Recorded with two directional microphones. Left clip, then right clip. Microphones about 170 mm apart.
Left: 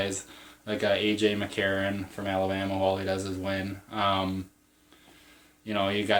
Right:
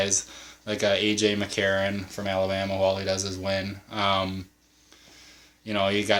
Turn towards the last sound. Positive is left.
turn(degrees=-35)  # may be behind; listen again after turning